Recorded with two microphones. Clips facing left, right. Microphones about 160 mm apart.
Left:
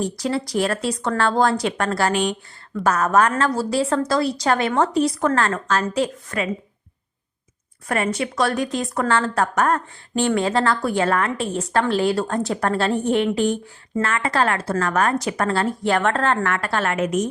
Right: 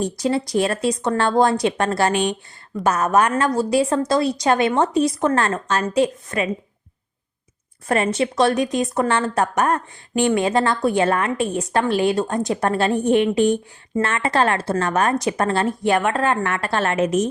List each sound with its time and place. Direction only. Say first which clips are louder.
0.0 s a woman's voice: right 2 dB; 20° right (ahead or behind)
7.9 s a woman's voice: right 3 dB; 25° right (ahead or behind)